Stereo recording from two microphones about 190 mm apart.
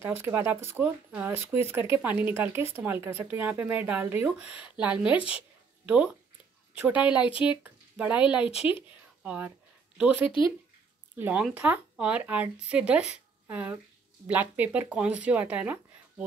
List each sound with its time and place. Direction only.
0.0 s speech: 10° right (ahead or behind)
6.7 s speech: 5° right (ahead or behind)
7.2 s speech: 30° left (ahead or behind)
7.6 s speech: 5° right (ahead or behind)
8.5 s speech: 30° left (ahead or behind)
8.8 s a sound: 10° right (ahead or behind)
9.9 s speech: 5° right (ahead or behind)